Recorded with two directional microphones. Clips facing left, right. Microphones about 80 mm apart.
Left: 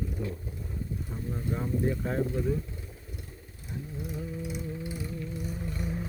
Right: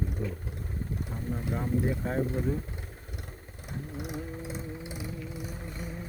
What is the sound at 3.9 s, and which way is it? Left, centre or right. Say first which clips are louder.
Vehicle: right 1 dB; right.